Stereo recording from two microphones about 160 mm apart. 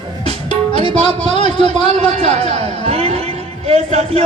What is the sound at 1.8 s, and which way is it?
A man's voice, 40° right (ahead or behind).